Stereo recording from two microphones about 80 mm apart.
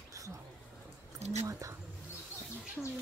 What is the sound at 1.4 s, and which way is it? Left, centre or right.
Speech, right.